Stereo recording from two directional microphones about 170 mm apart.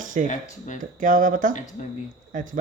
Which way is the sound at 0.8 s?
50° right (ahead or behind).